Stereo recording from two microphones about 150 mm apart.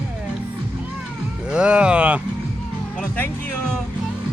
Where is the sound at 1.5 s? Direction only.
5° right (ahead or behind).